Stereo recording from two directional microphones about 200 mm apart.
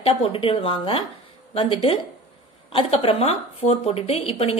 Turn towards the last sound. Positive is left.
turn(degrees=30)  # may be behind; listen again after turning